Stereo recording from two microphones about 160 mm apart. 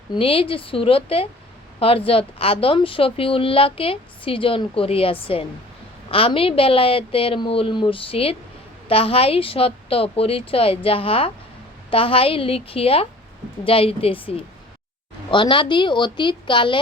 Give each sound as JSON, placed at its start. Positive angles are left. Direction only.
{"t": 0.1, "sound": "a woman's voice", "side_deg": 35}